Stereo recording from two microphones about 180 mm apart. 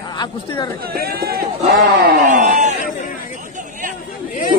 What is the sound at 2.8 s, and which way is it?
Speech, 45° left (ahead or behind).